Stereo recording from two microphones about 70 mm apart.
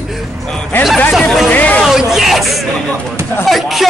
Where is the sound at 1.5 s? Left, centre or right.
Left.